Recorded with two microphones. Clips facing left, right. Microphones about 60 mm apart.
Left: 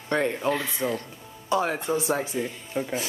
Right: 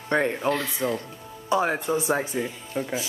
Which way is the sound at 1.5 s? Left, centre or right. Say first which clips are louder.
Right 1 dB; centre.